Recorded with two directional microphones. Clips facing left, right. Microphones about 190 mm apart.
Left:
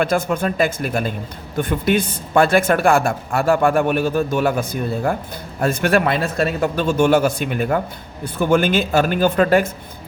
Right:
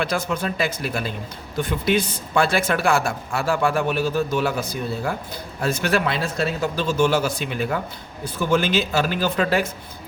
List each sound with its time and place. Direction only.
0.0 s speech: 50° left (ahead or behind)